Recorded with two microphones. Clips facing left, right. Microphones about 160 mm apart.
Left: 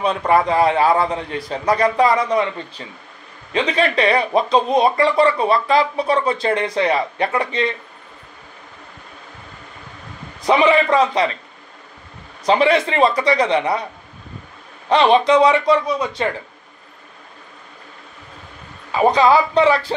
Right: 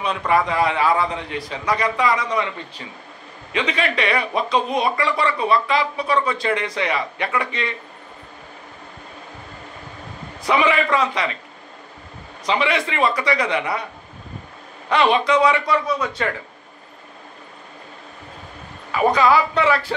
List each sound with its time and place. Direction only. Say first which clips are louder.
0.0 s speech: left 3 dB; 35° left (ahead or behind)
3.5 s speech: left 4 dB; 35° left (ahead or behind)
10.4 s speech: left 4 dB; 30° left (ahead or behind)
12.4 s speech: left 6 dB; 40° left (ahead or behind)
14.9 s a man's voice: left 4 dB; 25° left (ahead or behind)
18.9 s a man's voice: left 3 dB; 25° left (ahead or behind)